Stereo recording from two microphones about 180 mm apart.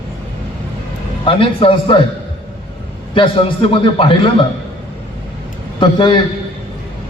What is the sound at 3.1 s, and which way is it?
A man's voice, 30° left (ahead or behind).